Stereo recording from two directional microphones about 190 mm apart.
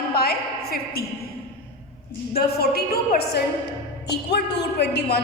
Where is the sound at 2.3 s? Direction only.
55° left (ahead or behind).